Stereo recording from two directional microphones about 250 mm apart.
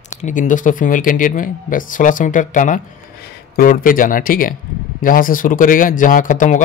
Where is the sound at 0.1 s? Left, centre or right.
Left.